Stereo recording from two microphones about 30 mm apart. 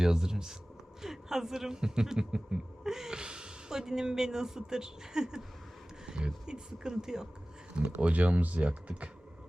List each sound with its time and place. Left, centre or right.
0.0 s speech: right
3.2 s speech: right
7.9 s speech: right